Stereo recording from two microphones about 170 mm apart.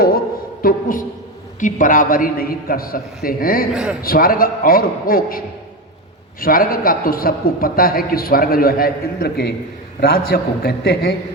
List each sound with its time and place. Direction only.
0.6 s a woman's voice: 55° left (ahead or behind)
6.4 s a man's voice: 55° left (ahead or behind)